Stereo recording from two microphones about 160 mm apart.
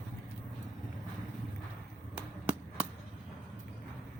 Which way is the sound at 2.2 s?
10° right (ahead or behind).